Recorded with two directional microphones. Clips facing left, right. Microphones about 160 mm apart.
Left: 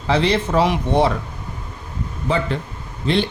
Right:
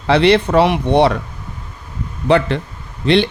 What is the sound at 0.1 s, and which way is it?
Speech, 70° right (ahead or behind).